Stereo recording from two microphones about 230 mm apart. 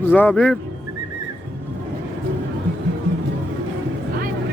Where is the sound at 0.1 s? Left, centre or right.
Centre.